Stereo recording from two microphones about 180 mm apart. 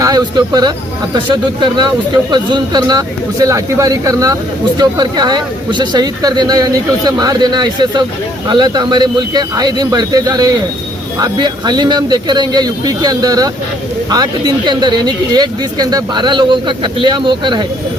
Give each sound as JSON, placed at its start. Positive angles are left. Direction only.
{"t": 0.0, "sound": "speech", "side_deg": -20}